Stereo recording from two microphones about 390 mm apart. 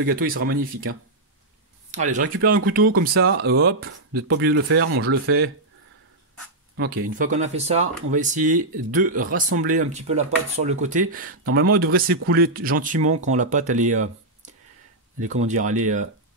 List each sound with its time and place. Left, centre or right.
0.0 s speech: right
6.8 s speech: right
15.1 s speech: centre